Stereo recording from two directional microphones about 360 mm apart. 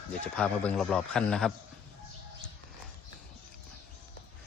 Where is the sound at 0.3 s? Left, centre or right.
Centre.